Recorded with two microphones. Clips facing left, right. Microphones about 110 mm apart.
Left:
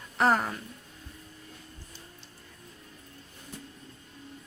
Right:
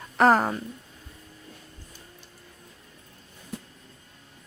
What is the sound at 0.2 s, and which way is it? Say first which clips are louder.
Speech: right 5 dB; 45° right (ahead or behind).